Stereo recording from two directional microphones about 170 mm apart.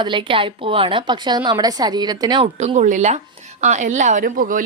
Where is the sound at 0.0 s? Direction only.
30° right (ahead or behind).